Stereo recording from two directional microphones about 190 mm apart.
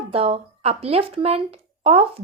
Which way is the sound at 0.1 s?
30° right (ahead or behind).